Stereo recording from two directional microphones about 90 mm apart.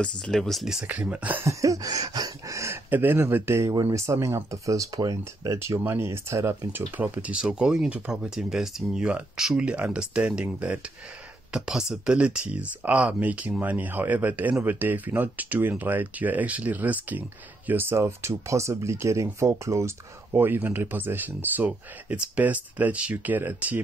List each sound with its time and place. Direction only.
0.2 s speech: 5° left (ahead or behind)
0.8 s speech: 15° right (ahead or behind)
1.4 s a sound: 35° right (ahead or behind)
2.7 s speech: 25° right (ahead or behind)